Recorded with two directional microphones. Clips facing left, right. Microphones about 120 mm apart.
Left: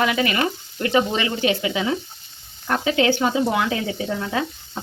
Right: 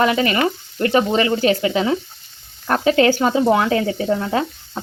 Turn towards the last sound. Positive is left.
turn(degrees=-40)  # may be behind; listen again after turning